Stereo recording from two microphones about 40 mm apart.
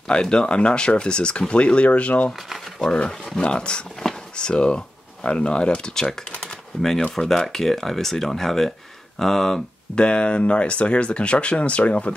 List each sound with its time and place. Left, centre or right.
0.1 s speech: left
4.0 s drawer open or close: centre
4.4 s speech: left
6.4 s typing: centre
7.2 s speech: centre
9.9 s speech: left